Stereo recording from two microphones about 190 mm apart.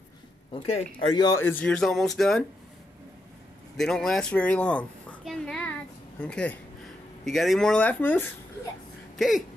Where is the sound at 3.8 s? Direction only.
Centre (ahead or behind).